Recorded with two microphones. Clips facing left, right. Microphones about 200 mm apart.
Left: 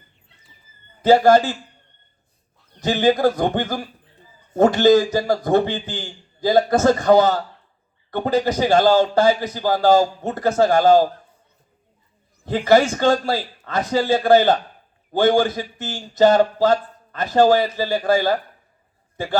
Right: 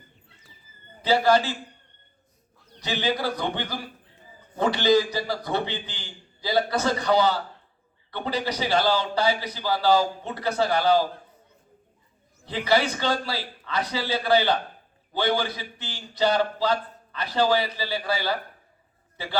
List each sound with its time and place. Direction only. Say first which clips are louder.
1.0 s speech: left 7 dB; 45° left (ahead or behind)
2.8 s speech: left 10 dB; 45° left (ahead or behind)
12.5 s speech: left 8 dB; 45° left (ahead or behind)